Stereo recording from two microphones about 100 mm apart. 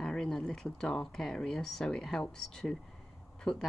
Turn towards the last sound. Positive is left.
turn(degrees=5)  # may be behind; listen again after turning